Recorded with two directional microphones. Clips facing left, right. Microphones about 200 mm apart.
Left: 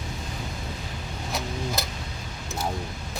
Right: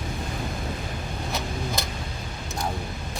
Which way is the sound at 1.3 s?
Centre (ahead or behind).